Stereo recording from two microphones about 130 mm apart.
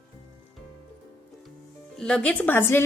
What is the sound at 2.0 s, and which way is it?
Speech, 5° left (ahead or behind).